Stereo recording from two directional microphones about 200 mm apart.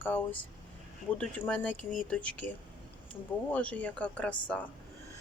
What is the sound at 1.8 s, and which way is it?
Speech, 40° left (ahead or behind).